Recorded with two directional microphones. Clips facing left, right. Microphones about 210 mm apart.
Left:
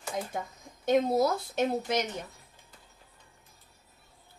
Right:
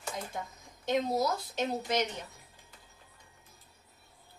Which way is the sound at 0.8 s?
50° left (ahead or behind).